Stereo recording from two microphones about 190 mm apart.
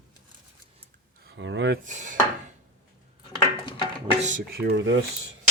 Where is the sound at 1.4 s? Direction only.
70° right (ahead or behind).